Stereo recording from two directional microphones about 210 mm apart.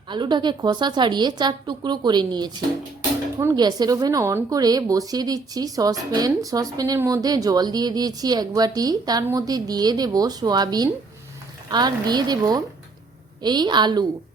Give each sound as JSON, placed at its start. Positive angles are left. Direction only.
{"t": 0.1, "sound": "a woman's voice", "side_deg": -20}